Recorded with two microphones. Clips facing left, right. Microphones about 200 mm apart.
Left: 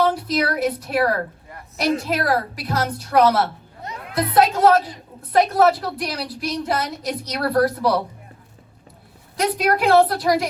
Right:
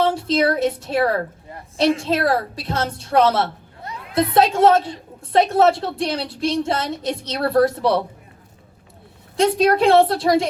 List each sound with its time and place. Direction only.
0.0 s a woman's voice: 25° right (ahead or behind)
9.4 s a woman's voice: 25° right (ahead or behind)